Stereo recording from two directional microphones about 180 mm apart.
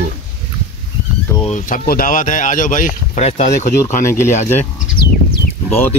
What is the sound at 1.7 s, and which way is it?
Speech, 50° left (ahead or behind).